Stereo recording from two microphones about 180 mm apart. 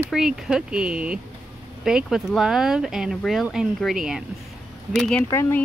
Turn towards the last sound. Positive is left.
turn(degrees=15)  # may be behind; listen again after turning